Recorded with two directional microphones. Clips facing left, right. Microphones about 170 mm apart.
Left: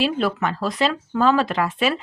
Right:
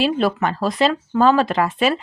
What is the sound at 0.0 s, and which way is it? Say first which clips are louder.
Speech: right 3 dB; 30° right (ahead or behind).